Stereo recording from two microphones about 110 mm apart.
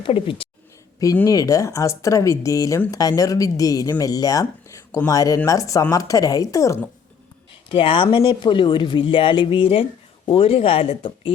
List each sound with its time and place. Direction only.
0.0 s speech: 55° left (ahead or behind)
1.3 s speech: 30° left (ahead or behind)
7.7 s speech: 55° left (ahead or behind)